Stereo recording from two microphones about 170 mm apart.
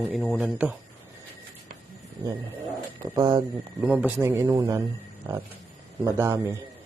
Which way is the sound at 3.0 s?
25° right (ahead or behind).